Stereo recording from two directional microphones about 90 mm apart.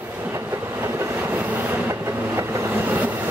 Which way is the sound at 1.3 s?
25° right (ahead or behind).